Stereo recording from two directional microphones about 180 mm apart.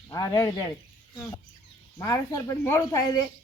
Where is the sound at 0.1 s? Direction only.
20° left (ahead or behind).